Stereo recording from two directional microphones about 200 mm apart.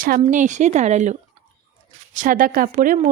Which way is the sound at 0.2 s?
40° right (ahead or behind).